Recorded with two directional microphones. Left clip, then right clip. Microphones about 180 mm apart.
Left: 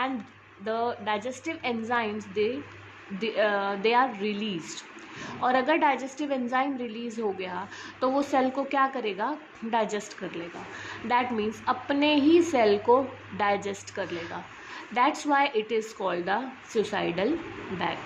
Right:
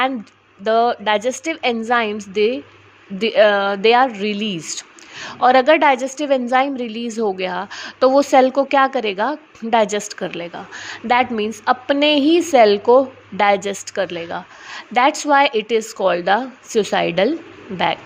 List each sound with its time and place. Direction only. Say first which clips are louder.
0.6 s a woman's voice: right 13 dB; 45° right (ahead or behind)